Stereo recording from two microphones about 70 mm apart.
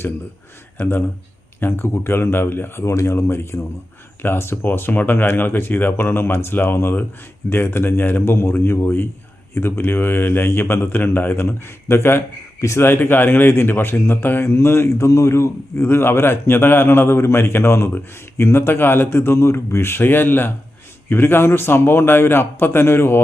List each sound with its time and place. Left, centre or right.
0.8 s speech: left
12.5 s speech: left
12.8 s speech: left